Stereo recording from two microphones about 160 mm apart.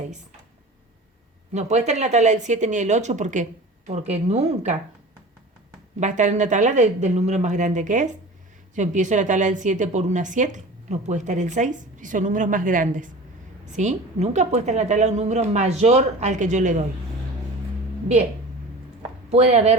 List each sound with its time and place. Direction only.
1.5 s a woman's voice: 45° right (ahead or behind)
6.0 s a woman's voice: 50° right (ahead or behind)
19.3 s a woman's voice: 40° right (ahead or behind)